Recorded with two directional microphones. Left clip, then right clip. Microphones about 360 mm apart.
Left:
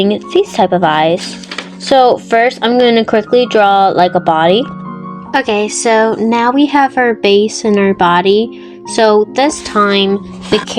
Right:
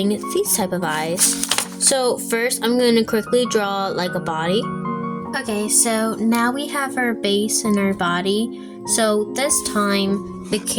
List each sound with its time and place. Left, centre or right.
0.0 s speech: right
5.3 s speech: right